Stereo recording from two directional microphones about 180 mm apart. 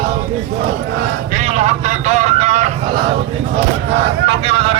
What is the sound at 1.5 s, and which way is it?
Vehicle, 40° right (ahead or behind).